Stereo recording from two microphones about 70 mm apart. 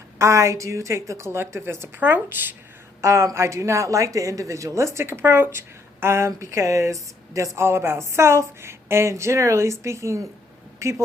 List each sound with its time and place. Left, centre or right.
0.2 s speech: right
3.0 s speech: right